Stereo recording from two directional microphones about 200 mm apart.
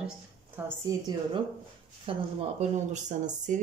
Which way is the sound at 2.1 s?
30° right (ahead or behind).